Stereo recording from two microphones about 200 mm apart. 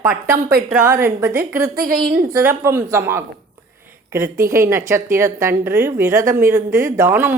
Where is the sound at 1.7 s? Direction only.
45° right (ahead or behind).